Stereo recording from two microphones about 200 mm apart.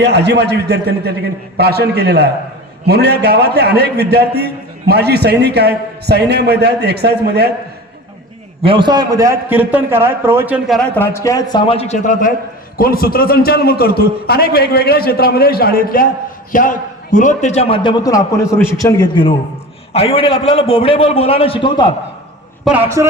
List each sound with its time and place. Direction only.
0.0 s a man's voice: 55° right (ahead or behind)
8.6 s a man's voice: 25° right (ahead or behind); by 10.8 s 5° right (ahead or behind)
10.8 s a man's voice: 10° left (ahead or behind); by 12.3 s 35° left (ahead or behind)
12.7 s a man's voice: 45° left (ahead or behind); by 21.9 s 25° left (ahead or behind)
22.6 s a man's voice: 10° right (ahead or behind)